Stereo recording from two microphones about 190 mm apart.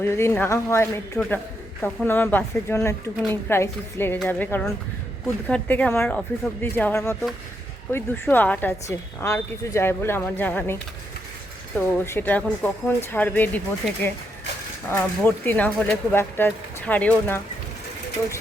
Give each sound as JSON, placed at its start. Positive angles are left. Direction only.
{"t": 0.0, "sound": "a woman's voice", "side_deg": 15}
{"t": 12.0, "sound": "a woman's voice", "side_deg": 10}